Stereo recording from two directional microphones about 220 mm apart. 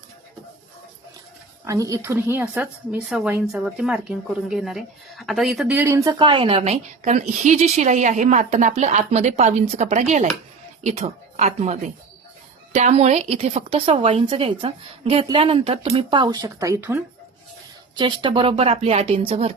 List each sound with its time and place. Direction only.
1.6 s a woman's voice: 15° right (ahead or behind)